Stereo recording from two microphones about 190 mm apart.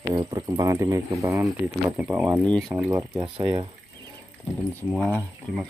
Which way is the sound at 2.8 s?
10° right (ahead or behind).